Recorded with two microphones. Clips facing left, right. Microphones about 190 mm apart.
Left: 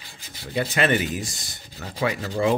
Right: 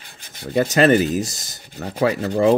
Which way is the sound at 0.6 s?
40° right (ahead or behind).